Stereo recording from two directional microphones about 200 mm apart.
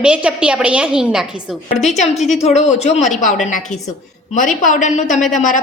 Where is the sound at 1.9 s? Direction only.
35° left (ahead or behind).